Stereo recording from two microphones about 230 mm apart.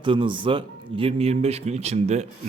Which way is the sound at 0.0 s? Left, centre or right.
Right.